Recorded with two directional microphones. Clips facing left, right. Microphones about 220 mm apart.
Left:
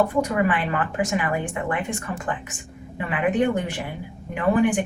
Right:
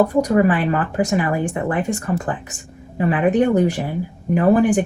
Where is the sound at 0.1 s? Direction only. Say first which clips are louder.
Right 6 dB; 40° right (ahead or behind).